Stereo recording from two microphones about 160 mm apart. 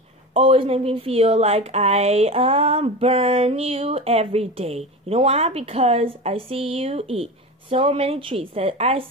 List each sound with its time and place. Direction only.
0.3 s speech: 35° right (ahead or behind)